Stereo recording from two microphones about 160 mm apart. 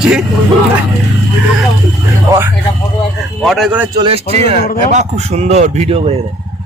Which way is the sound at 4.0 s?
40° right (ahead or behind).